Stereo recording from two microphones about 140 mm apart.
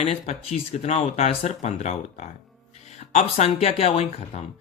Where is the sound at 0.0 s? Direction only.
50° left (ahead or behind).